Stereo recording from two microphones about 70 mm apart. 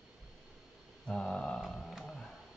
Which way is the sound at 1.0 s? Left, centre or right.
Centre.